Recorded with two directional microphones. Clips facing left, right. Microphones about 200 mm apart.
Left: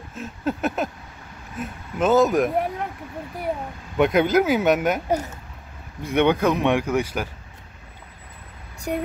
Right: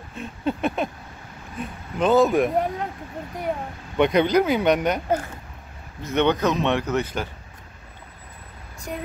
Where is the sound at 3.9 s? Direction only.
5° left (ahead or behind).